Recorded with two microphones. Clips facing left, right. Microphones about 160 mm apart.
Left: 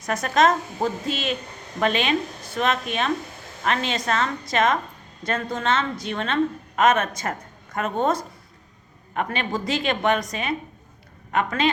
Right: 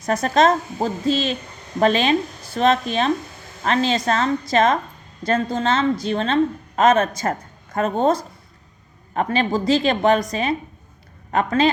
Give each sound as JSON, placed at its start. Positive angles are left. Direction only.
{"t": 0.0, "sound": "a woman's voice", "side_deg": -30}